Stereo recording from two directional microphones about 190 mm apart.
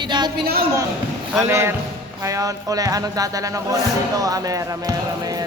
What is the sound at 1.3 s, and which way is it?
Speech, 15° right (ahead or behind).